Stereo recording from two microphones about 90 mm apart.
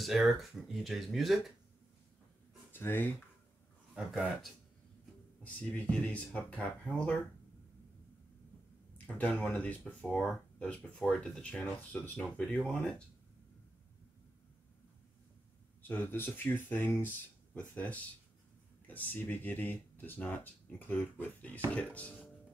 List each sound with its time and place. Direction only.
0.0 s speech: centre (ahead or behind)
2.7 s speech: 25° left (ahead or behind)
5.4 s speech: 15° left (ahead or behind)
8.9 s speech: 15° left (ahead or behind)
15.9 s speech: 20° left (ahead or behind)